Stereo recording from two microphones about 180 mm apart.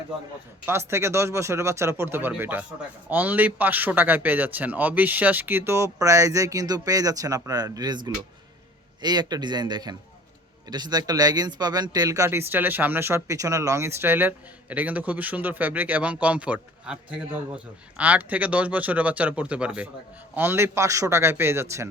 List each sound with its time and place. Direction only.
0.6 s speech: 15° right (ahead or behind)